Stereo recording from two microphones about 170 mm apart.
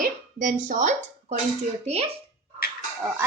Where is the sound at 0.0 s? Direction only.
50° right (ahead or behind).